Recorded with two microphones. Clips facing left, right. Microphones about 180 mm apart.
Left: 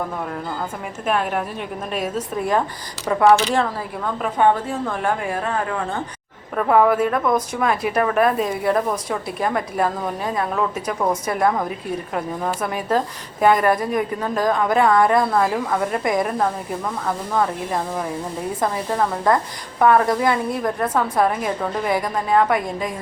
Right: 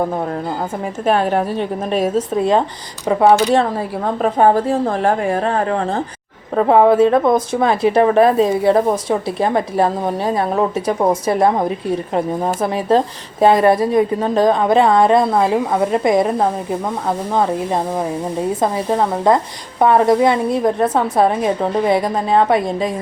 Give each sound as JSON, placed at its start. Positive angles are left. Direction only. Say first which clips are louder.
{"t": 0.0, "sound": "a woman's voice", "louder": "right 7 dB", "side_deg": -35}